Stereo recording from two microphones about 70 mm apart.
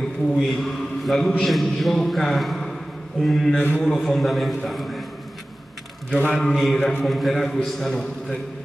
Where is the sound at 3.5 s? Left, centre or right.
Left.